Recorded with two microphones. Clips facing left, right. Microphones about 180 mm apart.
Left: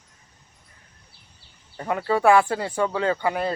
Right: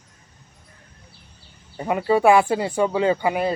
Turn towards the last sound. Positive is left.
turn(degrees=-15)  # may be behind; listen again after turning